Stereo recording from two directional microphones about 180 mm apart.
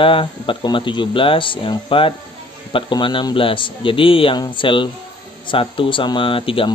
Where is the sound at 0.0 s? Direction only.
30° left (ahead or behind).